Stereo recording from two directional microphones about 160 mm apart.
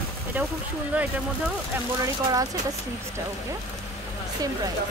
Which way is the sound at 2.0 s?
20° right (ahead or behind).